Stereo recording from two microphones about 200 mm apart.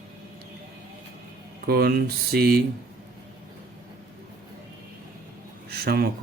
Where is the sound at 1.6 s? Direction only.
50° right (ahead or behind).